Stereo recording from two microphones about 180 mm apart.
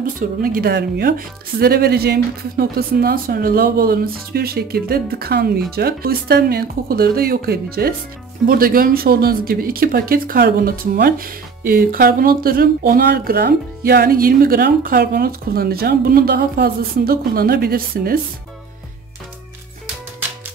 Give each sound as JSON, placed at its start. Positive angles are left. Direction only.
{"t": 0.0, "sound": "speech", "side_deg": -55}